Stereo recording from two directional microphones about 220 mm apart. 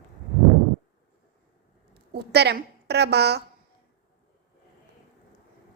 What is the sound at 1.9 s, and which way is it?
A woman's voice, 50° right (ahead or behind).